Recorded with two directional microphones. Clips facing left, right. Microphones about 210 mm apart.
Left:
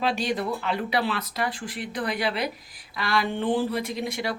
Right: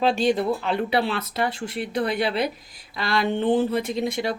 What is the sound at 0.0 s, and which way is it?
Speech, 25° right (ahead or behind).